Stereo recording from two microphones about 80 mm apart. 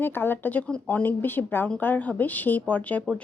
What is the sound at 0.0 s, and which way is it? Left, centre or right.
A woman's voice, left.